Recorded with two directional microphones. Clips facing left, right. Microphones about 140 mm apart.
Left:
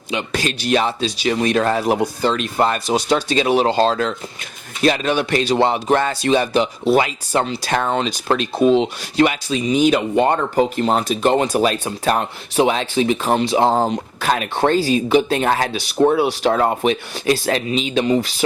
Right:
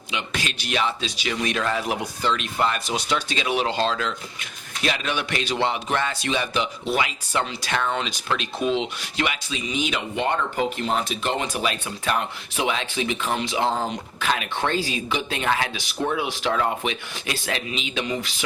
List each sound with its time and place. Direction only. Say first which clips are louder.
0.1 s speech: left 7 dB; 40° left (ahead or behind)